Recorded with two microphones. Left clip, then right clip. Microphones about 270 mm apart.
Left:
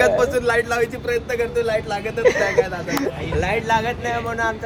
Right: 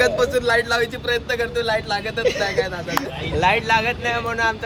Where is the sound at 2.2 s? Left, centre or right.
Centre.